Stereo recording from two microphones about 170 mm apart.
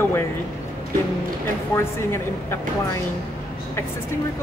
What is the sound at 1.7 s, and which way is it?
Speech, 15° left (ahead or behind).